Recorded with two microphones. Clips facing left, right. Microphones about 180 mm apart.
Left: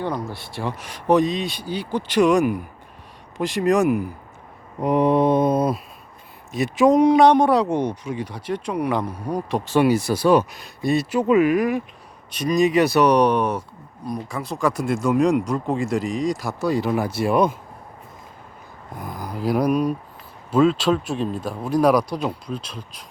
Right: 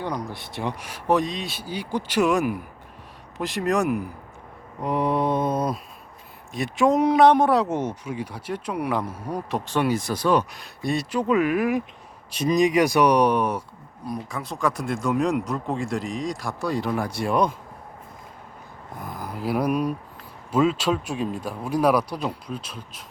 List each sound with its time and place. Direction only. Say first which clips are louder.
0.0 s speech: left 3 dB; 15° right (ahead or behind); by 4.1 s centre (ahead or behind)
4.8 s mantra: left 6 dB; 20° left (ahead or behind)
6.5 s speech: left 4 dB; centre (ahead or behind)
12.3 s speech: left 1 dB; 25° right (ahead or behind); by 17.5 s 5° left (ahead or behind)
19.0 s speech: left 4 dB; 5° right (ahead or behind)